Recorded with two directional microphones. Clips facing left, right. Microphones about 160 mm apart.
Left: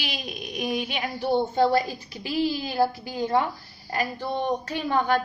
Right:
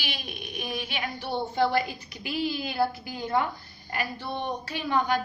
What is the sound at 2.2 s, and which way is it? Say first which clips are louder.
Speech: left 4 dB; 35° left (ahead or behind).